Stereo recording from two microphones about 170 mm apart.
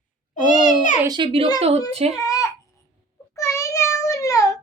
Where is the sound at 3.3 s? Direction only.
20° left (ahead or behind).